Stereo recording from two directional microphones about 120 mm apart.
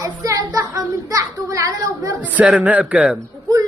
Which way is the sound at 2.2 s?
10° right (ahead or behind).